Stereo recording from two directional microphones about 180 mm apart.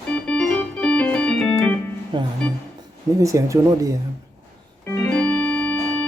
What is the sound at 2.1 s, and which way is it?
Speech, 25° right (ahead or behind).